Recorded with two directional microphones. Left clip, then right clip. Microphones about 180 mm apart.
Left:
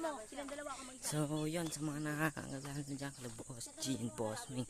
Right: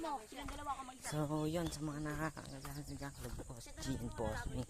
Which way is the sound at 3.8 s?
20° left (ahead or behind).